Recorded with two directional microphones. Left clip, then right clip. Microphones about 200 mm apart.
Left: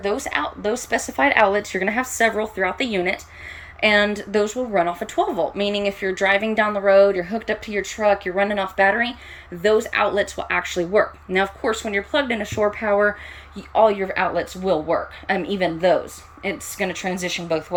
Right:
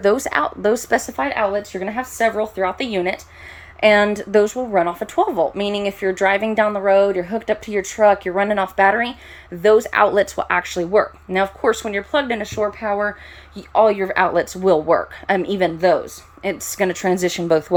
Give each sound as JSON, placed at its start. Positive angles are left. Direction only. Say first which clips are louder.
{"t": 0.0, "sound": "speech", "louder": "right 6 dB", "side_deg": -30}
{"t": 1.1, "sound": "speech", "louder": "left 3 dB", "side_deg": -5}